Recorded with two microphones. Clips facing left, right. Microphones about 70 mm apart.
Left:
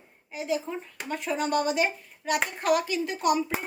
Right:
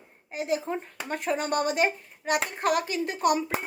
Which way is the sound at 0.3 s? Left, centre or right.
Right.